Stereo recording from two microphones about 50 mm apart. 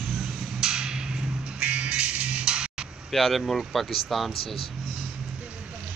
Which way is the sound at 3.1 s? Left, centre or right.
Centre.